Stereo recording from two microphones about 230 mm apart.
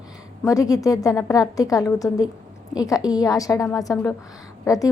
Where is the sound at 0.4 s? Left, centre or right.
Centre.